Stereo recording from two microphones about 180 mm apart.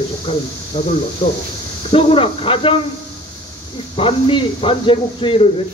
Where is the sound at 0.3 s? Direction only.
30° left (ahead or behind).